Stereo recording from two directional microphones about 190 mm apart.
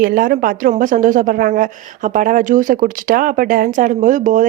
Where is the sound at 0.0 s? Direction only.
45° right (ahead or behind).